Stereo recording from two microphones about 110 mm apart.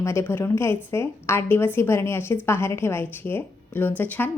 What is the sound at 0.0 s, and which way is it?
A woman's voice, 25° left (ahead or behind).